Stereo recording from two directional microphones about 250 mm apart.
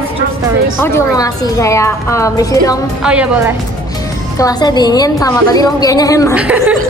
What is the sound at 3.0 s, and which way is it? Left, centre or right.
Speech, centre.